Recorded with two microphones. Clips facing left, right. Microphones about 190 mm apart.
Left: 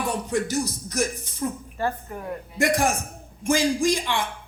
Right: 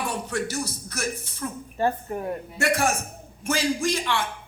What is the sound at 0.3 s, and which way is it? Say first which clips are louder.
A man's voice: left 4 dB; 15° left (ahead or behind).